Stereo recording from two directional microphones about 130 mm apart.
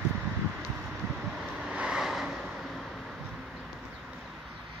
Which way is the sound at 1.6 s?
5° right (ahead or behind).